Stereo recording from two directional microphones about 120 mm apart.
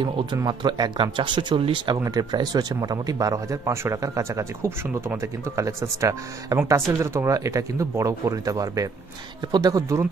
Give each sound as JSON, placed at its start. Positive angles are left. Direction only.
{"t": 0.4, "sound": "speech", "side_deg": -35}